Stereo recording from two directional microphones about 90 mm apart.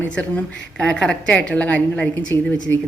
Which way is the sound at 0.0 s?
15° left (ahead or behind).